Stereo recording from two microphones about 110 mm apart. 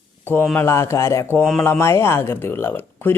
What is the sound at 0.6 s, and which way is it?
Speech, 25° left (ahead or behind).